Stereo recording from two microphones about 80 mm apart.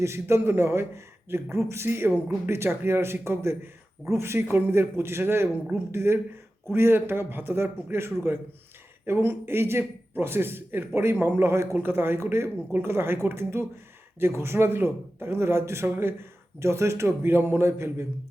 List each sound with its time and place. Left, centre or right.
0.0 s a man's voice: right